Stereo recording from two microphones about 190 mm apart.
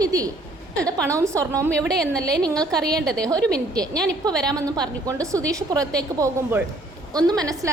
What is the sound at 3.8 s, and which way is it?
A woman's voice, 20° right (ahead or behind).